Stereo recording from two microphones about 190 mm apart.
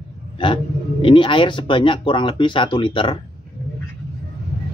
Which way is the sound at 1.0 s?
25° left (ahead or behind).